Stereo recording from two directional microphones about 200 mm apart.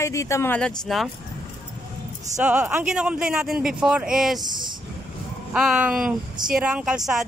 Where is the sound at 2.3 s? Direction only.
5° right (ahead or behind).